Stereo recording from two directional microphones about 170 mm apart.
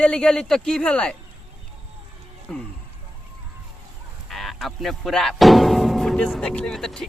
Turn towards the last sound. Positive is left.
turn(degrees=0)  # may be behind; listen again after turning